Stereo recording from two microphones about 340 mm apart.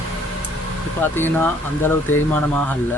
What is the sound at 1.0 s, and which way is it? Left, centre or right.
Speech, centre.